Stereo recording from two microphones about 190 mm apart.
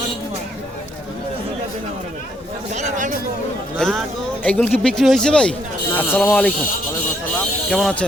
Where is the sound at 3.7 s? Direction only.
5° left (ahead or behind).